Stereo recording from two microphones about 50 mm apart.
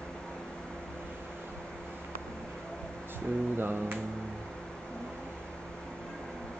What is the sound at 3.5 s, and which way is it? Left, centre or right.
Speech, right.